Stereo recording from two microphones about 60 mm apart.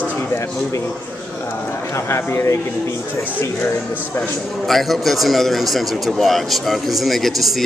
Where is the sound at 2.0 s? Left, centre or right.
Left.